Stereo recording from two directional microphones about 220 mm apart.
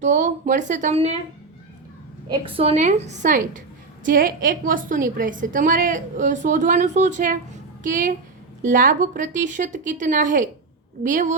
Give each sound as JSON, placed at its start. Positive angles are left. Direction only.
{"t": 0.0, "sound": "a woman's voice", "side_deg": -35}
{"t": 2.3, "sound": "a woman's voice", "side_deg": -25}